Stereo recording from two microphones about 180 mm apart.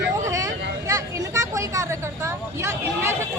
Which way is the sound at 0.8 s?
15° right (ahead or behind).